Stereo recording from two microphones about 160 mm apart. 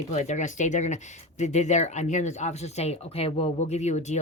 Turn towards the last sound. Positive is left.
turn(degrees=45)  # may be behind; listen again after turning